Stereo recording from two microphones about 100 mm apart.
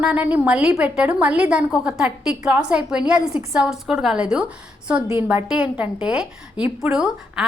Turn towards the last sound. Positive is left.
turn(degrees=-5)  # may be behind; listen again after turning